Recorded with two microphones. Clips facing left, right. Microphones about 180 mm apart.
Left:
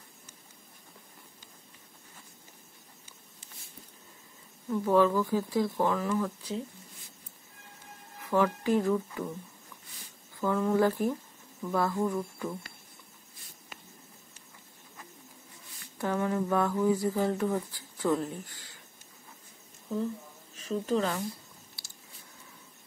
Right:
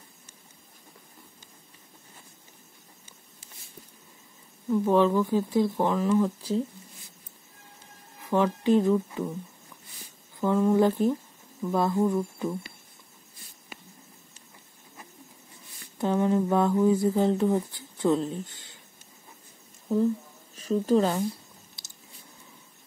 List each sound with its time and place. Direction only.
4.6 s speech: 15° right (ahead or behind)
8.2 s speech: 20° right (ahead or behind)
10.4 s speech: 20° right (ahead or behind)
16.0 s speech: 20° right (ahead or behind)
20.5 s speech: 35° right (ahead or behind)
21.8 s a sound: 20° right (ahead or behind)